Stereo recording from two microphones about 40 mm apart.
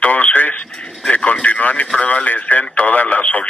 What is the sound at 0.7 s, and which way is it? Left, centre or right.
Speech, left.